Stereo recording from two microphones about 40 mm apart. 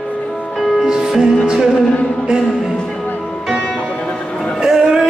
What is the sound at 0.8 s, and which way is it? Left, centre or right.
Music, centre.